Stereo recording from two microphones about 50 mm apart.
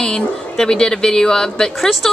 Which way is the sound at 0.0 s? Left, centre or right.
Centre.